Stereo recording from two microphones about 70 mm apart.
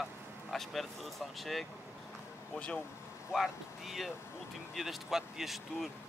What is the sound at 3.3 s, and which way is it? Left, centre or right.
Speech, centre.